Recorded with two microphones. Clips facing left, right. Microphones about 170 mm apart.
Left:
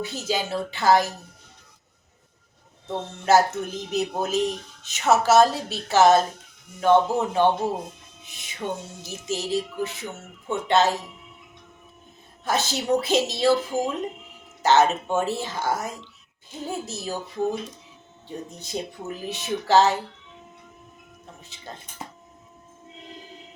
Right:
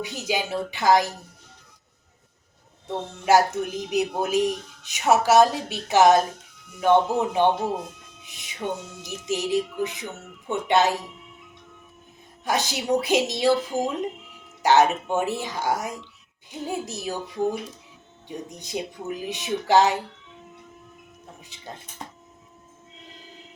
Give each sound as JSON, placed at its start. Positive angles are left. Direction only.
{"t": 0.0, "sound": "speech", "side_deg": -15}
{"t": 2.8, "sound": "speech", "side_deg": -15}
{"t": 12.5, "sound": "speech", "side_deg": -15}
{"t": 14.6, "sound": "speech", "side_deg": -15}
{"t": 21.4, "sound": "speech", "side_deg": -10}